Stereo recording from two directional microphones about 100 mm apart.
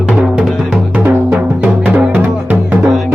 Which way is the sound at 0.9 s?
20° right (ahead or behind).